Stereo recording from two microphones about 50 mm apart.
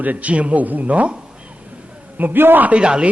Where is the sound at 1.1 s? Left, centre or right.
Right.